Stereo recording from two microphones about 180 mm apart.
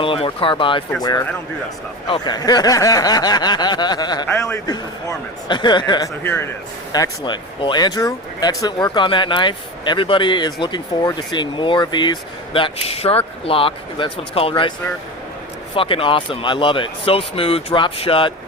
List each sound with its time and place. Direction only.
0.0 s speech: 30° left (ahead or behind)
2.0 s speech: 25° left (ahead or behind)
4.3 s a man's voice: 5° left (ahead or behind)
4.5 s speech: 20° left (ahead or behind)
6.2 s speech: 15° left (ahead or behind)
6.9 s speech: 25° left (ahead or behind)
15.7 s speech: 30° left (ahead or behind)